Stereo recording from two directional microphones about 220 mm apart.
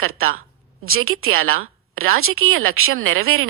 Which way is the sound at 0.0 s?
70° right (ahead or behind).